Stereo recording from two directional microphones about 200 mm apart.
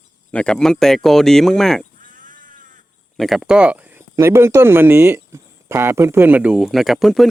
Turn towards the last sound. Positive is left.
turn(degrees=0)  # may be behind; listen again after turning